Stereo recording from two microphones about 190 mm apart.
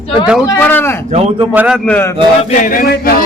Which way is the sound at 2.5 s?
45° left (ahead or behind).